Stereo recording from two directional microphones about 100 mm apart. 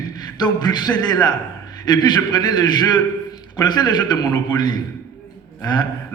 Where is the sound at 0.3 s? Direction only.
45° left (ahead or behind).